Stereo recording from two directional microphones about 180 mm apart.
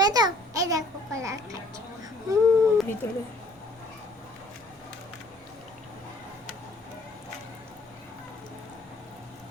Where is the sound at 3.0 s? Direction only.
15° left (ahead or behind).